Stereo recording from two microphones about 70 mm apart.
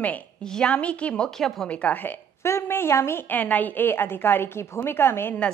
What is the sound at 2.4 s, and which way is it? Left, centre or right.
Speech, left.